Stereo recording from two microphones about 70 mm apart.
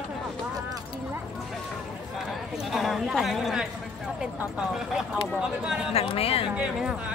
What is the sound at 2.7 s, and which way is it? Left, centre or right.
Speech, centre.